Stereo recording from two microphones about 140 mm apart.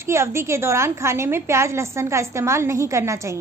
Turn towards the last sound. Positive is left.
turn(degrees=-20)  # may be behind; listen again after turning